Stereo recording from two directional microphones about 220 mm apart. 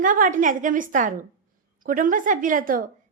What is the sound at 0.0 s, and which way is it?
A woman's voice, 35° right (ahead or behind).